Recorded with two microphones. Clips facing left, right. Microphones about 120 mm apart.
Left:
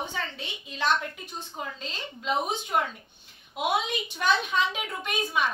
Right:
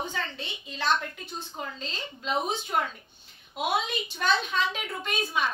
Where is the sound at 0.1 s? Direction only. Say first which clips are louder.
Even; 10° left (ahead or behind).